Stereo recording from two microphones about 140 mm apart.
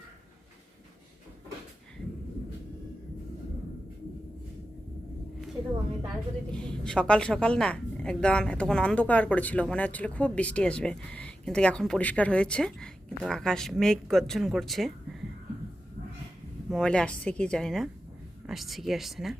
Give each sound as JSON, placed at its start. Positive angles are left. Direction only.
{"t": 6.5, "sound": "a woman's voice", "side_deg": 5}
{"t": 16.6, "sound": "a woman's voice", "side_deg": 5}